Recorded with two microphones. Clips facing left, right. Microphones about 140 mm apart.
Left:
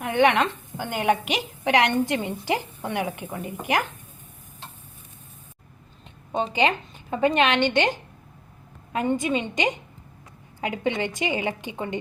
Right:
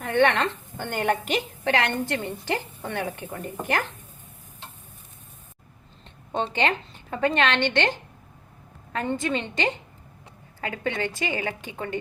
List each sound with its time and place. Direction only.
0.0 s a woman's voice: 15° left (ahead or behind)
6.3 s a woman's voice: 10° left (ahead or behind)